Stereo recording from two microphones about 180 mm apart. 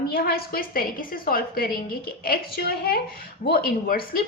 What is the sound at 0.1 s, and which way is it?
A woman's voice, 55° left (ahead or behind).